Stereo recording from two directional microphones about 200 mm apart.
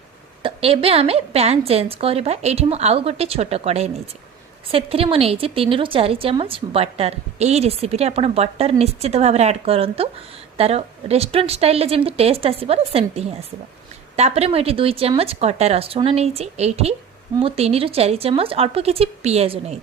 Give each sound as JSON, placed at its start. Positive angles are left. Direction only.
{"t": 0.4, "sound": "a woman's voice", "side_deg": -30}